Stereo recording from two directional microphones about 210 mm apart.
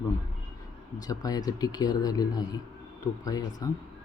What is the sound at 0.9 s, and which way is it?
Speech, 15° left (ahead or behind).